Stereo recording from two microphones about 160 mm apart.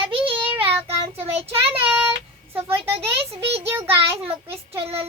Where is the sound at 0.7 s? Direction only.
35° right (ahead or behind).